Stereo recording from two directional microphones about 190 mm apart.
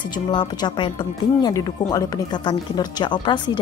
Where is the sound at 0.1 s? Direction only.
25° left (ahead or behind).